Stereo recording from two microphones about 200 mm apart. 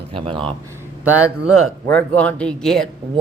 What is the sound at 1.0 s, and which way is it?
Speech, 10° right (ahead or behind).